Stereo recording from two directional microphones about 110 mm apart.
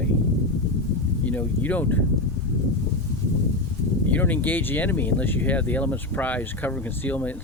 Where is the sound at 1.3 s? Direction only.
15° left (ahead or behind).